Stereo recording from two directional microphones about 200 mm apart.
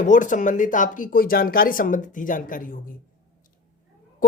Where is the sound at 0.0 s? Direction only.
40° left (ahead or behind).